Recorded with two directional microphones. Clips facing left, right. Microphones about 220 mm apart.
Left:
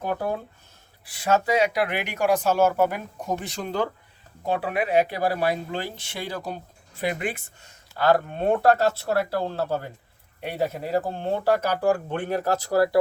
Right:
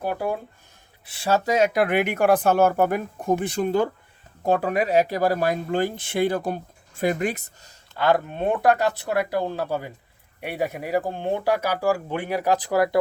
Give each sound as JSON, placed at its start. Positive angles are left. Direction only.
{"t": 0.0, "sound": "speech", "side_deg": -10}
{"t": 1.0, "sound": "speech", "side_deg": -30}
{"t": 1.5, "sound": "speech", "side_deg": -45}
{"t": 7.9, "sound": "speech", "side_deg": -20}